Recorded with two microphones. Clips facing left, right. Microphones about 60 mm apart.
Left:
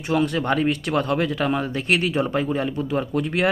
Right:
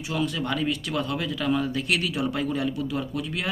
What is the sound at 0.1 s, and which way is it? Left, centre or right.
Speech, left.